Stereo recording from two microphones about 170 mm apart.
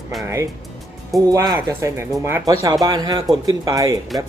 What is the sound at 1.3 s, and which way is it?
Speech, 15° right (ahead or behind).